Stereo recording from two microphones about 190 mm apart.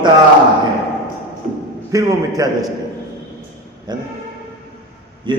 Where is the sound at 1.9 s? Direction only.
15° right (ahead or behind).